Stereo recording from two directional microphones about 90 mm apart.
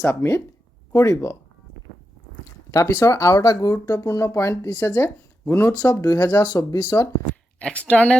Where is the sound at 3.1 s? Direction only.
35° left (ahead or behind).